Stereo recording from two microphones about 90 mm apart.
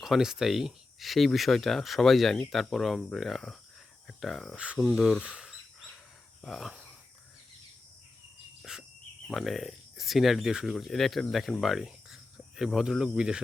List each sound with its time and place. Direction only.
0.0 s speech: 5° right (ahead or behind)
4.5 s speech: 15° right (ahead or behind)
4.8 s speech: 5° left (ahead or behind)
5.2 s speech: 10° right (ahead or behind)
8.7 s cricket: 10° right (ahead or behind)
9.2 s speech: centre (ahead or behind)